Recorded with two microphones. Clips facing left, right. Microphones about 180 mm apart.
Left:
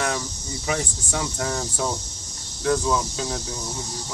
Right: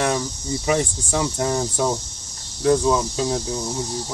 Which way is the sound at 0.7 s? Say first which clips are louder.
Right 5 dB; 25° right (ahead or behind).